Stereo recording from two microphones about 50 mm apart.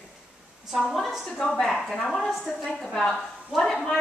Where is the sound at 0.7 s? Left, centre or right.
Centre.